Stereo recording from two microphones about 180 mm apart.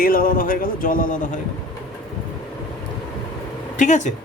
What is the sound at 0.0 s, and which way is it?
Speech, 50° left (ahead or behind).